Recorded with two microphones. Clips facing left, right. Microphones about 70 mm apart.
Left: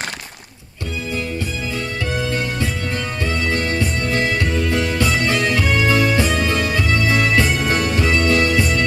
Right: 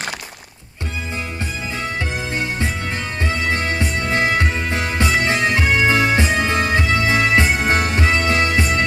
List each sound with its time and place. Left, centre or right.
3.4 s music: right